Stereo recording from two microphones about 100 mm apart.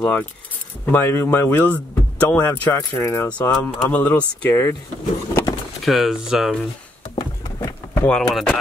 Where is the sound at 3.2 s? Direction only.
15° left (ahead or behind).